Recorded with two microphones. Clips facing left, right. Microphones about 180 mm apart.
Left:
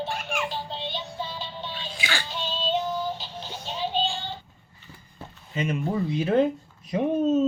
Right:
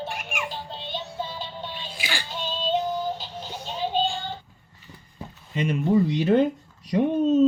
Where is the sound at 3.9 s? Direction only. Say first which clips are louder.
Right 3 dB; 50° right (ahead or behind).